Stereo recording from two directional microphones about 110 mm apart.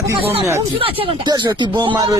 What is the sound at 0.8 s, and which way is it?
Speech, 55° right (ahead or behind).